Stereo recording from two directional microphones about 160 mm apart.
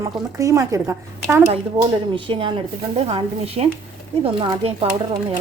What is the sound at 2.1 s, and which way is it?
Speech, 35° right (ahead or behind).